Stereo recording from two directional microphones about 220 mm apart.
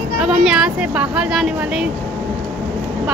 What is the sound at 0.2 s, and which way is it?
Speech, 5° right (ahead or behind).